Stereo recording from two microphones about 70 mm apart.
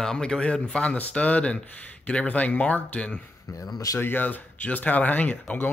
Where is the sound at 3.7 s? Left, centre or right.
Left.